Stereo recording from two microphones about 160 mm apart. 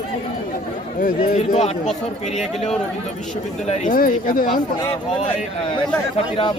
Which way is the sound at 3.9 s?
60° left (ahead or behind).